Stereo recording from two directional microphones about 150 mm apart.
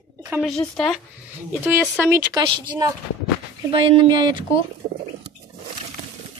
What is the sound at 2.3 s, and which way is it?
Speech, 30° right (ahead or behind).